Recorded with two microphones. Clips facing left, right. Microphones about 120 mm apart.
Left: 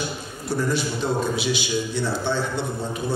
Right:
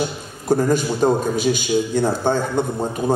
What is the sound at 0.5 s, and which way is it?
A man's voice, 45° right (ahead or behind).